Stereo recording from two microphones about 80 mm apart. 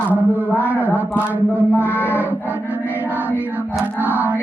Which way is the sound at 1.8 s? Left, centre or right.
Left.